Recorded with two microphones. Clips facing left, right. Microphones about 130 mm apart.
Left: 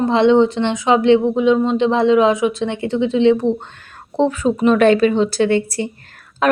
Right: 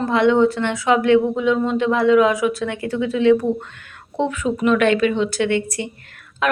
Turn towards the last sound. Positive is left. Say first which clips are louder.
# left 4 dB
turn(degrees=35)  # may be behind; listen again after turning